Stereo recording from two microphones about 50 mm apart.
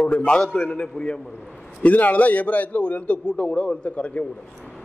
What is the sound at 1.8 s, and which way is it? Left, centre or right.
A man's voice, left.